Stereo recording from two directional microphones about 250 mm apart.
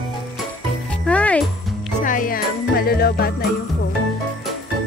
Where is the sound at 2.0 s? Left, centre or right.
Left.